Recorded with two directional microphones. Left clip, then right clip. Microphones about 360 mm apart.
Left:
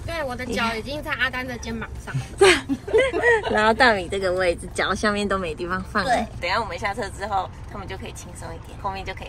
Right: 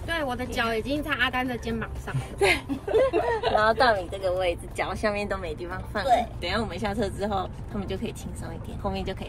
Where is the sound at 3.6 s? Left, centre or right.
Left.